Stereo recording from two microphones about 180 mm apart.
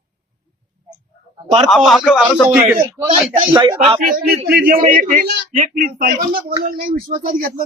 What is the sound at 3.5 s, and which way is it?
Speech, 20° right (ahead or behind).